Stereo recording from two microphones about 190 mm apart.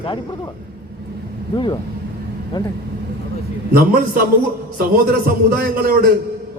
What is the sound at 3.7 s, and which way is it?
A man's voice, 50° right (ahead or behind).